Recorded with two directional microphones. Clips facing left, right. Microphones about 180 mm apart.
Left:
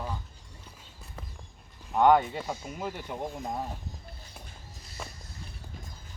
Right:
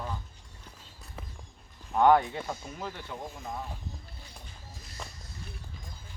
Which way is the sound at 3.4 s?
40° left (ahead or behind).